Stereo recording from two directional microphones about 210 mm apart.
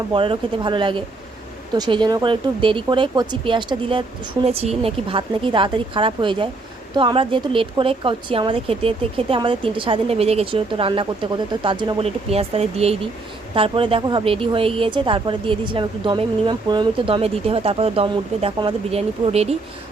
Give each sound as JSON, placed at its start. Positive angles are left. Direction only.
{"t": 0.1, "sound": "speech", "side_deg": -25}